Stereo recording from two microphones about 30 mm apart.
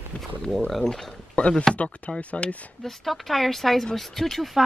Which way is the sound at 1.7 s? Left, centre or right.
Left.